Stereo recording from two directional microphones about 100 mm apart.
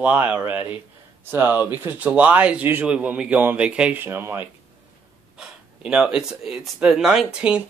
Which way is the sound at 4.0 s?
20° right (ahead or behind).